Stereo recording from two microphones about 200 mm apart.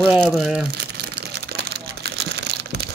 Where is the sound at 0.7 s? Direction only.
55° right (ahead or behind).